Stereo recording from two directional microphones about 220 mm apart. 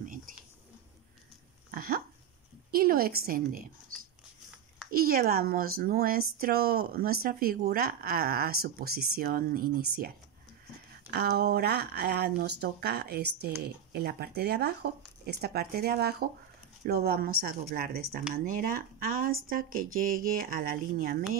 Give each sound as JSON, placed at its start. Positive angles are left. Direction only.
{"t": 0.0, "sound": "whispering", "side_deg": -40}
{"t": 1.7, "sound": "dog", "side_deg": -45}
{"t": 2.7, "sound": "a woman's voice", "side_deg": -45}